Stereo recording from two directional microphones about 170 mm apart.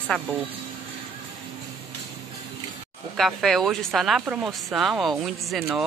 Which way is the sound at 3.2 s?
Centre (ahead or behind).